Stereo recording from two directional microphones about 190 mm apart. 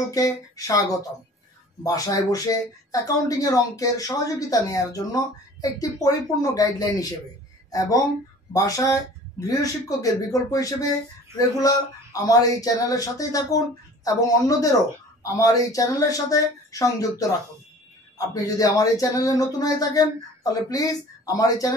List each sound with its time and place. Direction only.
0.1 s speech: 20° left (ahead or behind)
15.2 s speech: 15° left (ahead or behind)